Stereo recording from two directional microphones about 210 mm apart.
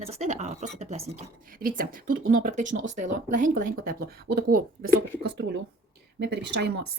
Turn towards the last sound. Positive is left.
turn(degrees=-50)  # may be behind; listen again after turning